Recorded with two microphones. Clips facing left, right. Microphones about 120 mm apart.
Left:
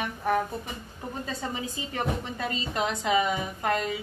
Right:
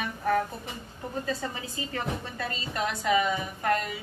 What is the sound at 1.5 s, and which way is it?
A woman's voice, 20° left (ahead or behind).